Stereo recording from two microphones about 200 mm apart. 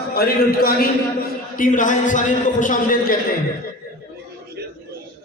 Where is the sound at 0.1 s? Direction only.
50° left (ahead or behind).